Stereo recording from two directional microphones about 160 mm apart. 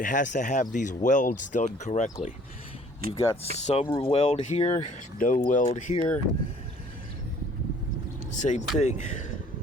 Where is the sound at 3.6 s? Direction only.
40° left (ahead or behind).